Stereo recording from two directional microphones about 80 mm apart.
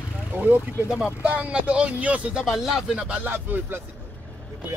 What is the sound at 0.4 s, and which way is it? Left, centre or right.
Speech, right.